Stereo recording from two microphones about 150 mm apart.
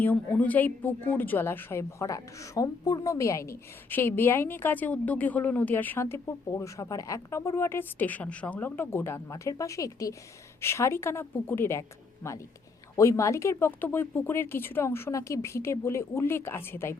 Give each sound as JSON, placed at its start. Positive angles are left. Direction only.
{"t": 0.0, "sound": "a woman's voice", "side_deg": 10}